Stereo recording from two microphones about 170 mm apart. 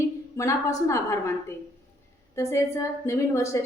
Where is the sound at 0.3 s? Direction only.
20° left (ahead or behind).